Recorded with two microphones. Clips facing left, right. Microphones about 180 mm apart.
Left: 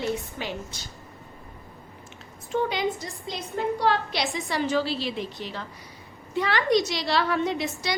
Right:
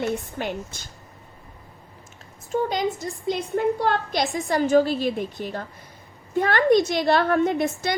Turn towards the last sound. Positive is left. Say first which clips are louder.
# right 5 dB
turn(degrees=-50)  # may be behind; listen again after turning